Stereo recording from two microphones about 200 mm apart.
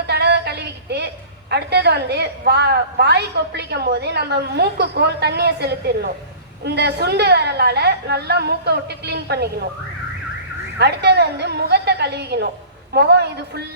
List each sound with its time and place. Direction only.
0.1 s a woman's voice: 55° right (ahead or behind)
10.8 s a woman's voice: 55° right (ahead or behind)